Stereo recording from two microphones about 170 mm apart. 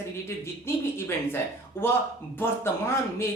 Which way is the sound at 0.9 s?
15° left (ahead or behind).